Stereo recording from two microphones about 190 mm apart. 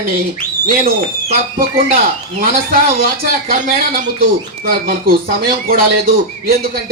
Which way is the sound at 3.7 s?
50° right (ahead or behind).